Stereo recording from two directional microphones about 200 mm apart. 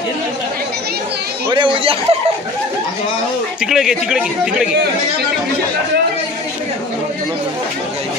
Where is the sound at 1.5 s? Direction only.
25° right (ahead or behind).